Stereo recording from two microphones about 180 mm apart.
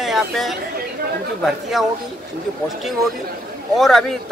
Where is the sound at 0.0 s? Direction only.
Centre (ahead or behind).